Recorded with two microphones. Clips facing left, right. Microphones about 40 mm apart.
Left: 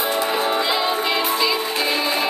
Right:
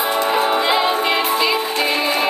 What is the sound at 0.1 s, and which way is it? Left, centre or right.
Music, centre.